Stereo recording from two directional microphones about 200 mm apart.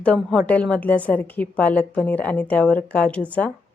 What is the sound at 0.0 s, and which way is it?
A woman's voice, 5° left (ahead or behind).